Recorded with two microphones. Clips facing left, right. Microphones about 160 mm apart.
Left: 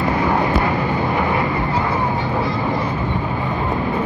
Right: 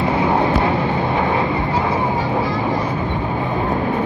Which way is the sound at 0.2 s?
20° right (ahead or behind).